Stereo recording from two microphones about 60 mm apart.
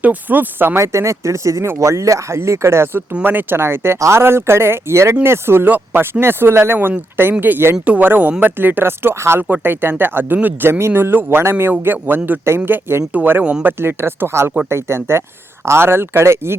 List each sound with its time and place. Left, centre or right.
0.0 s speech: right
0.8 s speech: right
3.1 s speech: right
9.4 s speech: right
13.4 s speech: centre
13.7 s speech: right